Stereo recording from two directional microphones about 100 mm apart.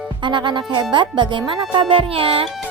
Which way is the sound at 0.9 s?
55° right (ahead or behind).